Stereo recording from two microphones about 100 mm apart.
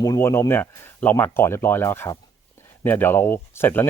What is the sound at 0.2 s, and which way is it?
Speech, 25° left (ahead or behind).